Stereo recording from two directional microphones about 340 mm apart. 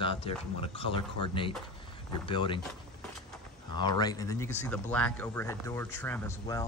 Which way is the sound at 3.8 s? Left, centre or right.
Centre.